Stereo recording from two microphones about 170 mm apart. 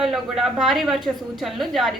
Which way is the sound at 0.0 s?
Centre (ahead or behind).